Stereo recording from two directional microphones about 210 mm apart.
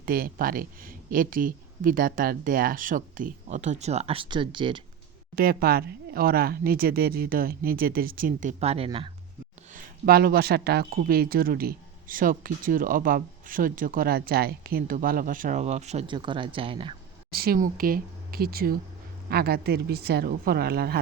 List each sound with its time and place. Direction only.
0.0 s speech: 45° right (ahead or behind); by 4.8 s 25° right (ahead or behind)
5.4 s speech: 45° right (ahead or behind); by 9.0 s 25° right (ahead or behind)
9.7 s speech: 45° right (ahead or behind); by 16.9 s 25° right (ahead or behind)
17.3 s speech: 45° right (ahead or behind)